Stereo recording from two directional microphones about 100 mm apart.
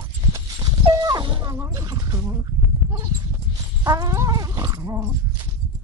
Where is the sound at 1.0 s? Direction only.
50° right (ahead or behind).